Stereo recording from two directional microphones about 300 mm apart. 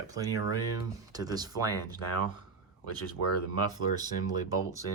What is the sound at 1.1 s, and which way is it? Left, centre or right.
Speech, centre.